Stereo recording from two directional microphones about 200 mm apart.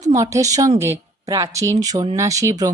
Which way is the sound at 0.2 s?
15° right (ahead or behind).